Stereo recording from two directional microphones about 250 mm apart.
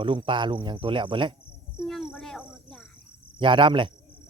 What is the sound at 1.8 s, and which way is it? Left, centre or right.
Cricket, centre.